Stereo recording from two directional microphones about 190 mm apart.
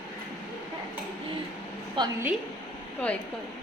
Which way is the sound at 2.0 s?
25° right (ahead or behind).